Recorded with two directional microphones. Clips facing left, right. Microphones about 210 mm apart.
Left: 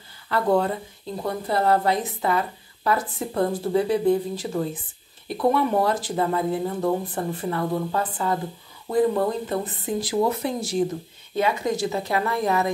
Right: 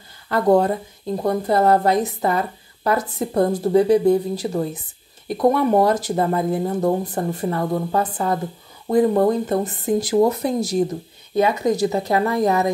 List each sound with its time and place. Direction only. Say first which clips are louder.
0.3 s a woman's voice: right 5 dB; 45° right (ahead or behind)